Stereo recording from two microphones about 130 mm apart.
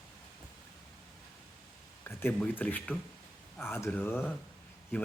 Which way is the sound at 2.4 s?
10° left (ahead or behind).